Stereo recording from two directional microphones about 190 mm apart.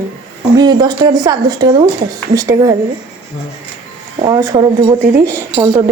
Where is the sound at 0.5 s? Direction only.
20° right (ahead or behind).